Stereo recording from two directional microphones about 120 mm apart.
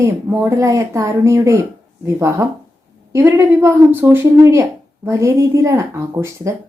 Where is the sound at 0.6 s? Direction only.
25° right (ahead or behind).